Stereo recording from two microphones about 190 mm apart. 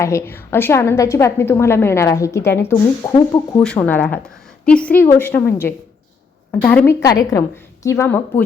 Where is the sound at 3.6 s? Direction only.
5° left (ahead or behind).